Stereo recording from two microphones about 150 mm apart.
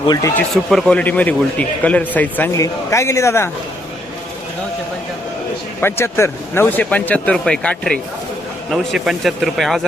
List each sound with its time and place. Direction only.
0.1 s speech: 20° left (ahead or behind)
0.5 s a man's voice: centre (ahead or behind); by 3.5 s 20° left (ahead or behind)
5.8 s a man's voice: 15° left (ahead or behind); by 9.8 s centre (ahead or behind)